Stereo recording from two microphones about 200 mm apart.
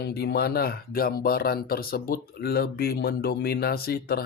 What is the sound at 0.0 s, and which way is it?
Speech, 55° left (ahead or behind).